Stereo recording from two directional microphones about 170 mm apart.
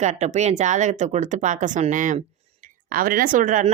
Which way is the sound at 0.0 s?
45° right (ahead or behind).